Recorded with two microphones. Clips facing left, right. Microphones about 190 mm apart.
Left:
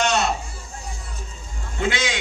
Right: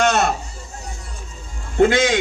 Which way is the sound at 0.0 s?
50° right (ahead or behind).